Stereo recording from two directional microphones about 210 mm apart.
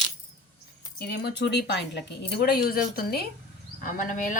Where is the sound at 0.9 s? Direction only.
50° left (ahead or behind).